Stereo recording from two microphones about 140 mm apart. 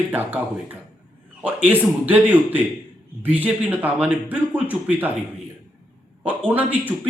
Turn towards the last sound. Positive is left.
turn(degrees=-10)  # may be behind; listen again after turning